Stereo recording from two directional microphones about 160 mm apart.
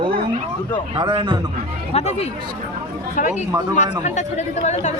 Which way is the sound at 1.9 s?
40° left (ahead or behind).